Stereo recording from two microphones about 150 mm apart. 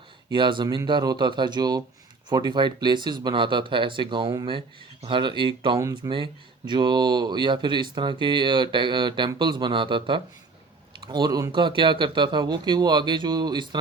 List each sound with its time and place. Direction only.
0.3 s speech: 30° right (ahead or behind)